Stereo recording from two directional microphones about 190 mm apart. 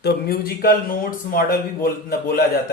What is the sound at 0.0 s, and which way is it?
A man's voice, 55° left (ahead or behind).